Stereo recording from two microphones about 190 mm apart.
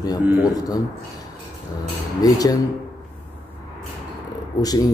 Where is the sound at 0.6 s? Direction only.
20° left (ahead or behind).